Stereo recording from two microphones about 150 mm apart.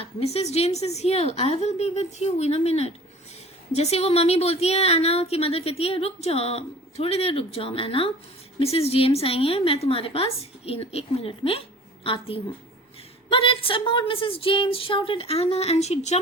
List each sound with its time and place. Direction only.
0.0 s a woman's voice: 45° left (ahead or behind)